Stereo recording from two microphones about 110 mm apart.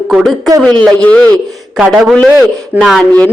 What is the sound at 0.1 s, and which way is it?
Speech, centre (ahead or behind).